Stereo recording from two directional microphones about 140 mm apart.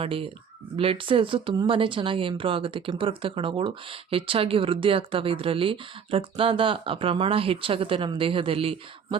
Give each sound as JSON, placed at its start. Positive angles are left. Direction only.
{"t": 0.0, "sound": "speech", "side_deg": -40}